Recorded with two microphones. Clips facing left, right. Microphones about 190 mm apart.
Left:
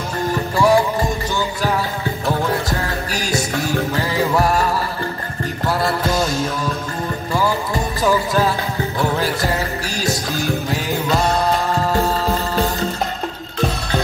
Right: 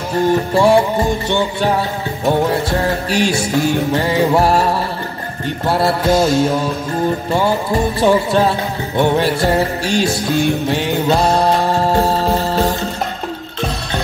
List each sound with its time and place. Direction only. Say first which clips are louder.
0.3 s music: right 3 dB; 30° right (ahead or behind)
2.2 s music: right 6 dB; 30° right (ahead or behind)
8.0 s music: right 3 dB; 30° right (ahead or behind)